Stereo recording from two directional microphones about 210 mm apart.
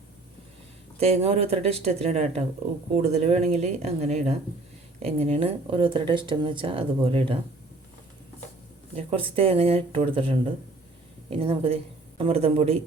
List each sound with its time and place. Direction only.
0.9 s speech: 30° right (ahead or behind)
9.0 s speech: 25° right (ahead or behind)